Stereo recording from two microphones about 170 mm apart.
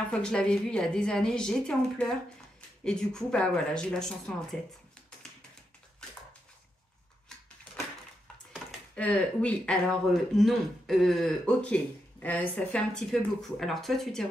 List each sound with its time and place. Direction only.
0.1 s speech: 5° left (ahead or behind)
8.9 s speech: 10° left (ahead or behind)